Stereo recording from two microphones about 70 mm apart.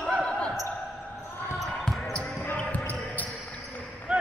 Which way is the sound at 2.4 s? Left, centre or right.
Left.